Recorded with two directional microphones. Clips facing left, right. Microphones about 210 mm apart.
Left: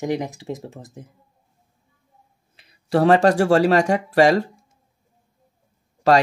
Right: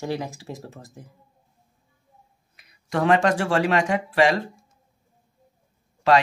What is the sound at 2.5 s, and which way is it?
Speech, 30° left (ahead or behind).